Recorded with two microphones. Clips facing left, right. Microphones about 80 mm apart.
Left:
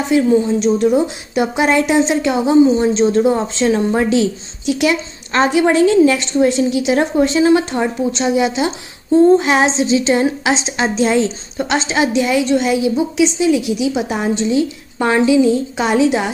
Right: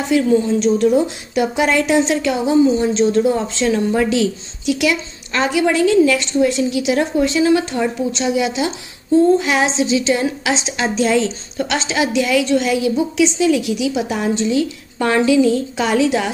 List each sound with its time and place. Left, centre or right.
0.1 s a woman's voice: left